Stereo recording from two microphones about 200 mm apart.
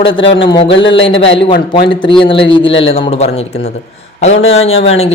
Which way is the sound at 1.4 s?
25° left (ahead or behind).